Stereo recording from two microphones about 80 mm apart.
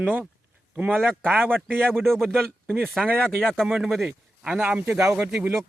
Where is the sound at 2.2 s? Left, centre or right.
Right.